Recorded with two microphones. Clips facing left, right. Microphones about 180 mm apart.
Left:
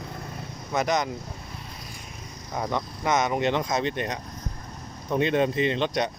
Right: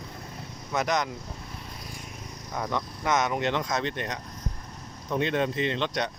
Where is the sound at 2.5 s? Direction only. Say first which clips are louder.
Left 2 dB; 20° left (ahead or behind).